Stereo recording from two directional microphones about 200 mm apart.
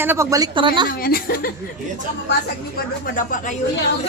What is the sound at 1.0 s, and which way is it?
Speech, 50° left (ahead or behind).